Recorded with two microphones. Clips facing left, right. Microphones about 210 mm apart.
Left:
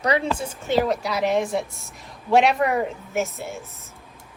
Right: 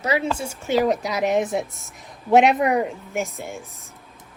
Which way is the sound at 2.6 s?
Centre (ahead or behind).